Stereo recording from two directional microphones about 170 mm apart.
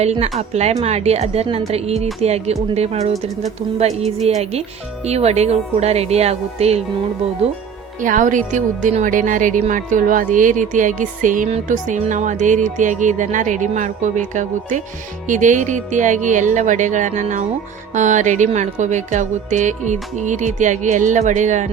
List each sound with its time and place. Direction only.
0.0 s a woman's voice: 40° right (ahead or behind)
7.9 s speech: 50° right (ahead or behind)